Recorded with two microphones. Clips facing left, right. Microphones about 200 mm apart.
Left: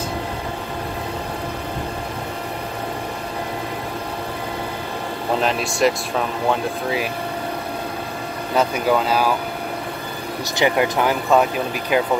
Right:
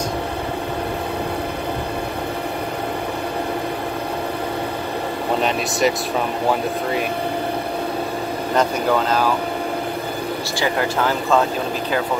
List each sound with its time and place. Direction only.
5.4 s speech: centre (ahead or behind)
10.6 s speech: 15° left (ahead or behind)